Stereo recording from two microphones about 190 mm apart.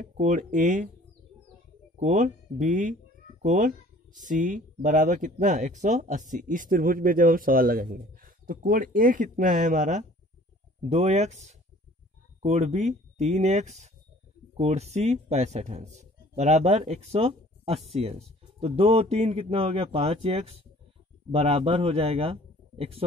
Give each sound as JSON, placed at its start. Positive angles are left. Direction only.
{"t": 0.0, "sound": "speech", "side_deg": -40}
{"t": 2.0, "sound": "speech", "side_deg": -40}